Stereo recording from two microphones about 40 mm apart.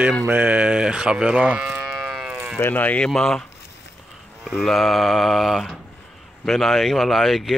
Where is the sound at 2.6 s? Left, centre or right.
Left.